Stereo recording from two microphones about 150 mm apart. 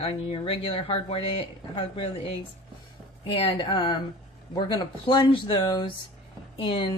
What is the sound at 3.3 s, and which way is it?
Speech, 35° left (ahead or behind).